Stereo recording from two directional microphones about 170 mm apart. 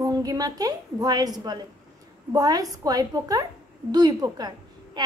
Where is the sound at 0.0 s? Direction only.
20° right (ahead or behind).